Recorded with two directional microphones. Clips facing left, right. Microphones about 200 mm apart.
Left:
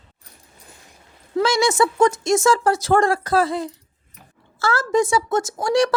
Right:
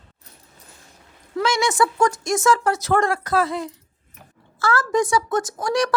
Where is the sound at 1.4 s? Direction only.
35° left (ahead or behind).